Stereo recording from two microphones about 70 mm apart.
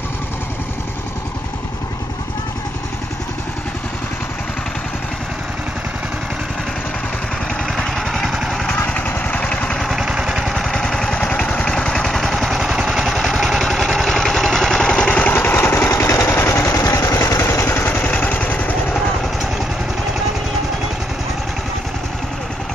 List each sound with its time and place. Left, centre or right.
7.6 s vehicle: centre
8.5 s vehicle: centre
9.8 s vehicle: centre
15.3 s vehicle: left
15.9 s vehicle: left